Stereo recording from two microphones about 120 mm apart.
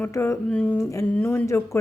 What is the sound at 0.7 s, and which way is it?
A woman's voice, 25° left (ahead or behind).